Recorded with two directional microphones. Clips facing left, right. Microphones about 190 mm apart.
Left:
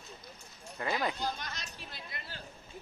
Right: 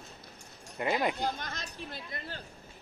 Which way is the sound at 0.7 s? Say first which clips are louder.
Right 4 dB; 20° right (ahead or behind).